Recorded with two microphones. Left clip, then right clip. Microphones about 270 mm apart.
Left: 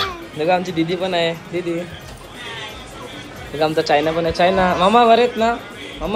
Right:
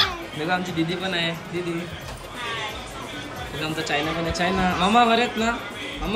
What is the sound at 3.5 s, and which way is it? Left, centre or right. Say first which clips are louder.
A man's voice: left 10 dB; centre.